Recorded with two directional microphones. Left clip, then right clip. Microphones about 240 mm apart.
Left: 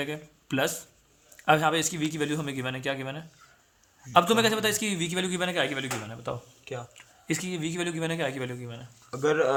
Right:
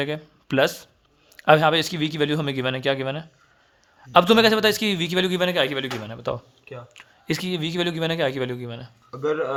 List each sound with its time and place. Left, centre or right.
0.0 s a man's voice: right
9.1 s speech: left